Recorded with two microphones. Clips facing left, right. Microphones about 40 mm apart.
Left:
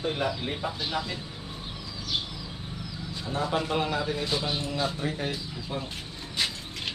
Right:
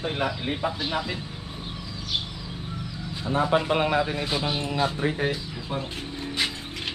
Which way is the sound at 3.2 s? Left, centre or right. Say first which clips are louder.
Right 6 dB; right.